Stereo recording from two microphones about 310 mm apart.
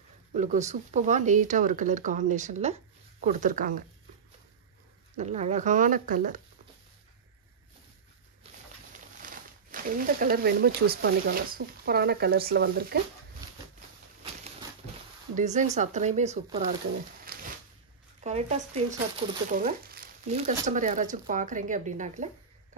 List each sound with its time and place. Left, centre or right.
0.3 s speech: right
5.1 s speech: right
8.9 s speech: right
15.3 s speech: right
17.3 s a sound: right
18.2 s speech: right
19.5 s speech: right